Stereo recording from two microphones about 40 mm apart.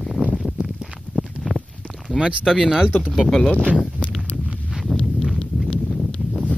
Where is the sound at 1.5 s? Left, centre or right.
Left.